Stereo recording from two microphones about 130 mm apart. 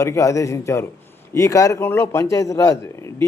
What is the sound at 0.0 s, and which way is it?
A man's voice, 25° left (ahead or behind).